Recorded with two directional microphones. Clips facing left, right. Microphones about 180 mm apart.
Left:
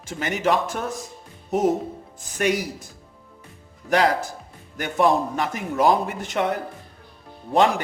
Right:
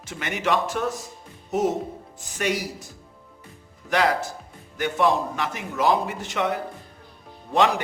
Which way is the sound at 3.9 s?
35° left (ahead or behind).